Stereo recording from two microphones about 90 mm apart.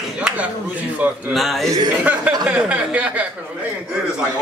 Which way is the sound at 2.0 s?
15° right (ahead or behind).